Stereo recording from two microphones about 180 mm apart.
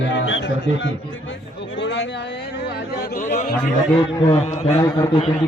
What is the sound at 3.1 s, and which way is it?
A man's voice, 45° left (ahead or behind).